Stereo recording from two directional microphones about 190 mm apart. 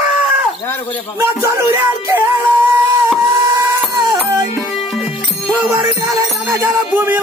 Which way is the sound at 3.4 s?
15° right (ahead or behind).